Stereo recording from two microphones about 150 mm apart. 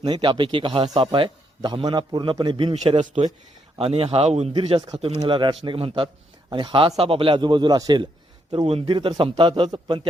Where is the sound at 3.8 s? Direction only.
40° right (ahead or behind).